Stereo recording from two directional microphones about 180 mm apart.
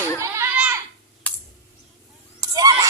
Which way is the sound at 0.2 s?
15° right (ahead or behind).